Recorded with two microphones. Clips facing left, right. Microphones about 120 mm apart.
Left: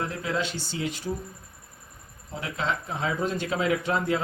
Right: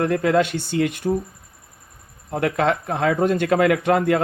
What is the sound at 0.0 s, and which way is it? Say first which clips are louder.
A man's voice: right 11 dB; 60° right (ahead or behind).